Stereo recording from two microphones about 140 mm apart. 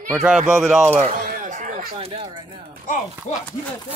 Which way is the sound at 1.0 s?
65° right (ahead or behind).